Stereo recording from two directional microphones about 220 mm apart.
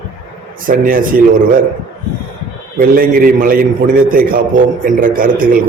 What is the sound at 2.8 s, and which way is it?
A man's voice, 40° right (ahead or behind).